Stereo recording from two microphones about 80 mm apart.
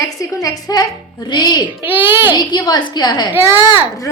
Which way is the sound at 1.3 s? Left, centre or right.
Left.